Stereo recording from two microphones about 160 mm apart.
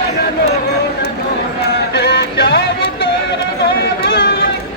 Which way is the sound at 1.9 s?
90° left.